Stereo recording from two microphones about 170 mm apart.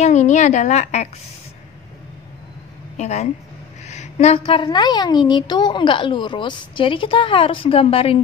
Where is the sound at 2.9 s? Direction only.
40° left (ahead or behind).